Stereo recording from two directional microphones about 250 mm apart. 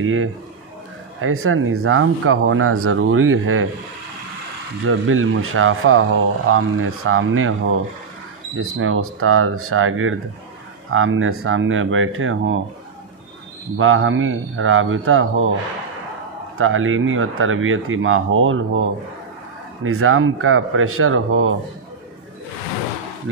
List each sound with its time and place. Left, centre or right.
0.0 s speech: right
4.8 s a man's voice: right
13.7 s a man's voice: right
16.5 s speech: right